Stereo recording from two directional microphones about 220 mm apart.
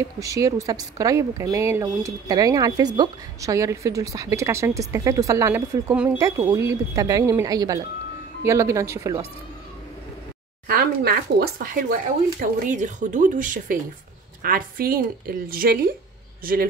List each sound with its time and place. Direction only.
0.0 s a woman's voice: 15° right (ahead or behind)
10.7 s speech: 45° right (ahead or behind)